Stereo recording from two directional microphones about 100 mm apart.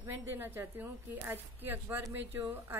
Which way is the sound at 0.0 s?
20° right (ahead or behind).